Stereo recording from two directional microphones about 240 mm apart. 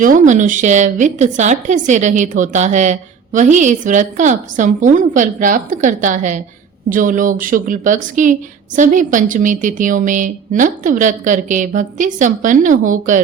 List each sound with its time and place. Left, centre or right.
0.0 s a woman's voice: right